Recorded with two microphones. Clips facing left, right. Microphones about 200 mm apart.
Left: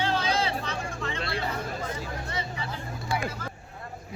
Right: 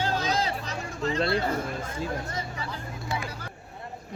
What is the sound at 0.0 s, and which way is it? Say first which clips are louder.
Music: even; 40° right (ahead or behind).